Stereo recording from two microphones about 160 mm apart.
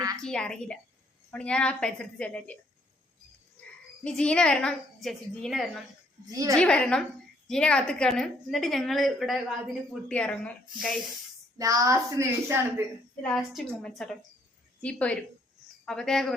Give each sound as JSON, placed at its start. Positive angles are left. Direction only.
{"t": 0.2, "sound": "a woman's voice", "side_deg": 5}
{"t": 4.0, "sound": "a woman's voice", "side_deg": 5}
{"t": 6.2, "sound": "a woman's voice", "side_deg": -20}
{"t": 6.6, "sound": "a woman's voice", "side_deg": 5}
{"t": 11.5, "sound": "a woman's voice", "side_deg": -20}
{"t": 13.2, "sound": "a woman's voice", "side_deg": 0}